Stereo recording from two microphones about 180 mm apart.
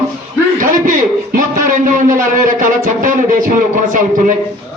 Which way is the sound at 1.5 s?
45° right (ahead or behind).